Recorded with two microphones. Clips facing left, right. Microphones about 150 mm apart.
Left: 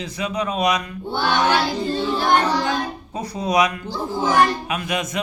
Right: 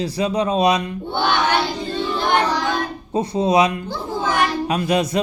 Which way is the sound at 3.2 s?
25° right (ahead or behind).